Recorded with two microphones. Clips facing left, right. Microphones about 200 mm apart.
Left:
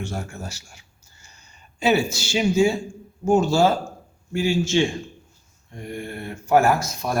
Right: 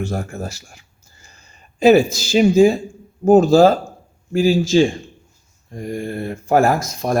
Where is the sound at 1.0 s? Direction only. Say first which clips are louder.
Right 4 dB; 90° right.